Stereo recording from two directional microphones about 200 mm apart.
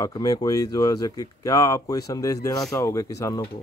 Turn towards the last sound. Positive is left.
turn(degrees=15)  # may be behind; listen again after turning